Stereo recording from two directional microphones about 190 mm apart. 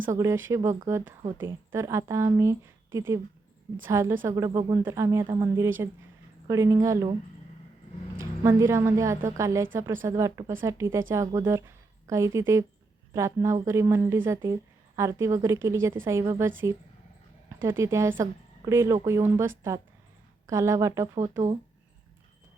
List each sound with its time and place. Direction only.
0.1 s a woman's voice: 15° right (ahead or behind)
8.2 s a woman's voice: 15° right (ahead or behind)
17.5 s a woman's voice: 15° right (ahead or behind)